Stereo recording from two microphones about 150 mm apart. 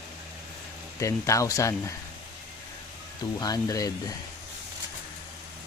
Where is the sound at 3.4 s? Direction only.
25° left (ahead or behind).